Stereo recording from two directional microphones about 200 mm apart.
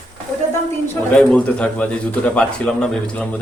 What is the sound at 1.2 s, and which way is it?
Speech, 5° left (ahead or behind).